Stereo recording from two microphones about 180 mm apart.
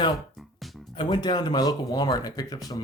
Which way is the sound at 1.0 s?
25° left (ahead or behind).